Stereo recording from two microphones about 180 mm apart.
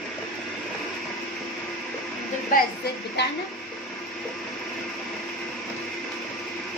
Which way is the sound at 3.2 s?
70° left (ahead or behind).